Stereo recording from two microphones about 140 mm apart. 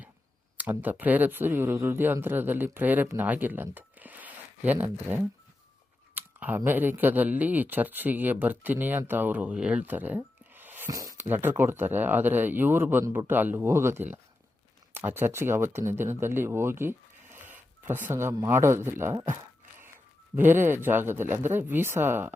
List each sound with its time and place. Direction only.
0.5 s speech: 10° right (ahead or behind)
6.1 s a sound: 15° right (ahead or behind)
6.7 s speech: 15° right (ahead or behind)
20.3 s speech: 15° right (ahead or behind)